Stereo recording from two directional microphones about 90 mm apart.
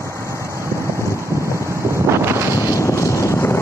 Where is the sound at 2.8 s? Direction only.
35° left (ahead or behind).